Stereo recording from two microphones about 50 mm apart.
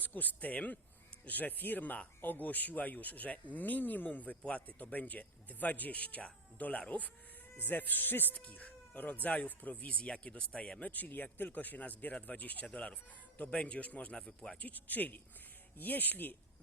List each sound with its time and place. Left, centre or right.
0.0 s speech: left
8.4 s speech: left
9.9 s a man's voice: left
10.9 s a man's voice: left; by 14.6 s centre
14.6 s speech: left